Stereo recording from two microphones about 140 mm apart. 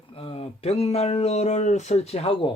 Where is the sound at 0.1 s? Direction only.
40° left (ahead or behind).